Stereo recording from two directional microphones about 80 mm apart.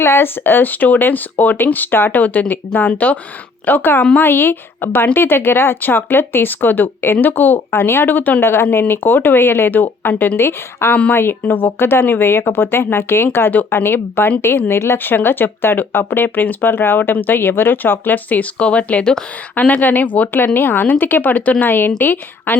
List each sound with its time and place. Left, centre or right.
0.0 s speech: left